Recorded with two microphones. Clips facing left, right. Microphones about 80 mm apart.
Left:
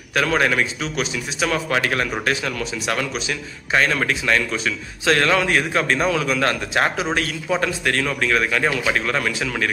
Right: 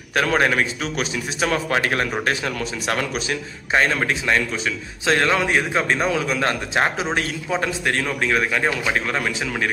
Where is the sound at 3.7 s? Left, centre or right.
Right.